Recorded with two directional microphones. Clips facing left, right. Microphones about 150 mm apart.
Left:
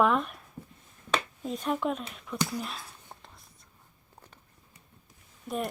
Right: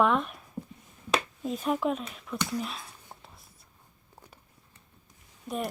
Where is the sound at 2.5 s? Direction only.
Centre (ahead or behind).